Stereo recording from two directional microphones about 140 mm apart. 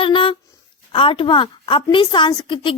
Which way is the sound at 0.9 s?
40° left (ahead or behind).